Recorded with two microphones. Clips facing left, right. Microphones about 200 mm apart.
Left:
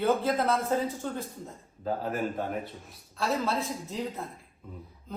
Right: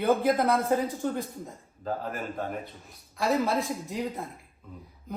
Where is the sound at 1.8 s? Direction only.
5° left (ahead or behind).